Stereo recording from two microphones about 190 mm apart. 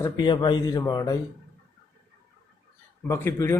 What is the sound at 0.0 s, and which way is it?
Speech, 25° left (ahead or behind).